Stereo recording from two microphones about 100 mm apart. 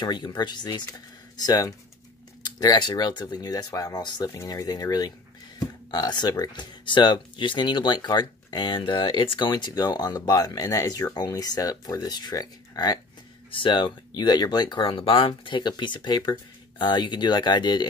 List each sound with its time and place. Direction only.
0.0 s speech: 45° left (ahead or behind)
13.5 s speech: 55° left (ahead or behind)
14.9 s speech: 60° left (ahead or behind)